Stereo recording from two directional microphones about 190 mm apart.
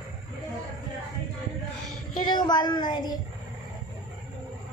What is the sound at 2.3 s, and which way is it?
Speech, 20° left (ahead or behind).